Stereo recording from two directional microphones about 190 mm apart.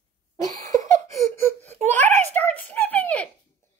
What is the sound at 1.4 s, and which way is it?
Baby cry, 10° left (ahead or behind).